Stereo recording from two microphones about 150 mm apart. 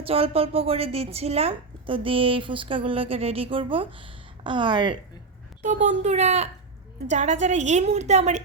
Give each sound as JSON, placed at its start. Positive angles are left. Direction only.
{"t": 0.0, "sound": "speech", "side_deg": -40}
{"t": 5.6, "sound": "a woman's voice", "side_deg": -55}